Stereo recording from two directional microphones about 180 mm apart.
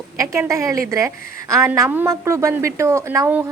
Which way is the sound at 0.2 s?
15° right (ahead or behind).